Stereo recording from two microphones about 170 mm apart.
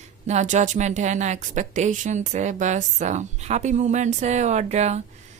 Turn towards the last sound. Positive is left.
turn(degrees=-40)  # may be behind; listen again after turning